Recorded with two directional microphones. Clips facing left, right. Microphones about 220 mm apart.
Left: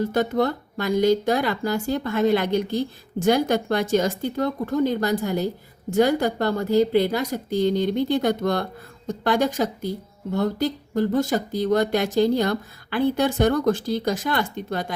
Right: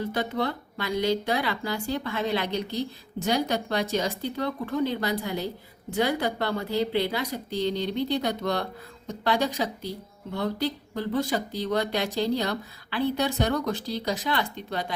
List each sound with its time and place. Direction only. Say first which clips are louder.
0.0 s speech: left 6 dB; 45° left (ahead or behind)